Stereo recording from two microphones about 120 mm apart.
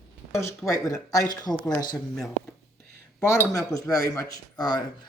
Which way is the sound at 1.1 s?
30° left (ahead or behind).